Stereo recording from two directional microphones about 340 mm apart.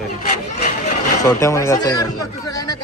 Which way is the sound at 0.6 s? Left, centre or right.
Centre.